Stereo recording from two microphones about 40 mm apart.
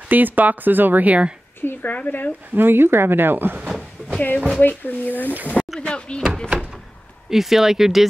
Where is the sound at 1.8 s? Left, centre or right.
Left.